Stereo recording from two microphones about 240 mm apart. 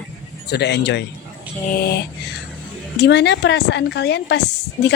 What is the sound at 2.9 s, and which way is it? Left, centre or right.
Speech, left.